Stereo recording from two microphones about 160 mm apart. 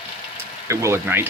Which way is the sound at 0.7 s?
15° right (ahead or behind).